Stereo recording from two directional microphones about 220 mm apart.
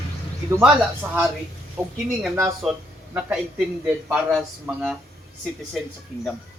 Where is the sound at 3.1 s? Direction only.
5° right (ahead or behind).